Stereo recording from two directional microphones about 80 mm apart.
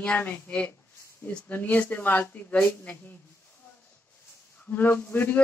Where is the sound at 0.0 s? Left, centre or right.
Left.